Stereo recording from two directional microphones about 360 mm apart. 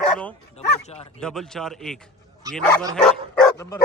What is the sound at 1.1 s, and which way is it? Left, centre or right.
Speech, centre.